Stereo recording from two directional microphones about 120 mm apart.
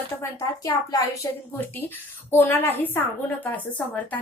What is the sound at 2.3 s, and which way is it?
A woman's voice, 20° left (ahead or behind).